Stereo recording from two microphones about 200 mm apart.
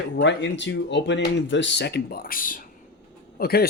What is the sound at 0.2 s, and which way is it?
Speech, 60° left (ahead or behind).